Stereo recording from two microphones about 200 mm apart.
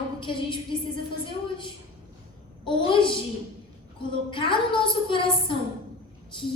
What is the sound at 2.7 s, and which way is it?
Speech, 25° left (ahead or behind).